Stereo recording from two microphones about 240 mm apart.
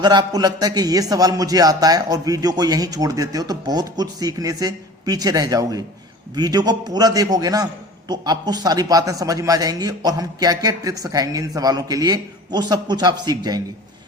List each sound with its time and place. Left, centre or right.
0.0 s a man's voice: centre